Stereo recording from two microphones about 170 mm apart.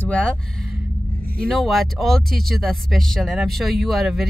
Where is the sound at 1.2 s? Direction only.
60° right (ahead or behind).